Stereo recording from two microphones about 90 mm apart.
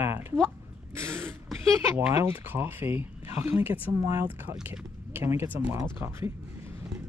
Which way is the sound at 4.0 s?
35° right (ahead or behind).